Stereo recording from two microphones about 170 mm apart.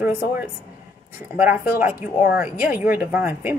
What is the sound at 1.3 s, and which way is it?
A woman's voice, 10° right (ahead or behind).